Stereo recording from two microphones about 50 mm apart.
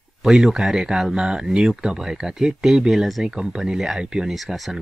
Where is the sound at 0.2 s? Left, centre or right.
Centre.